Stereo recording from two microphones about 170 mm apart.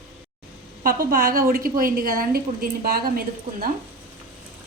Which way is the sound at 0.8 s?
60° right (ahead or behind).